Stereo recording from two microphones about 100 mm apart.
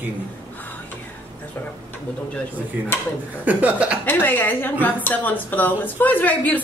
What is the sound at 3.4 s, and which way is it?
Speech, 15° right (ahead or behind).